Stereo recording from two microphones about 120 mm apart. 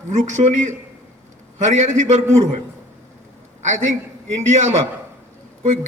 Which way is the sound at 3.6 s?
80° right.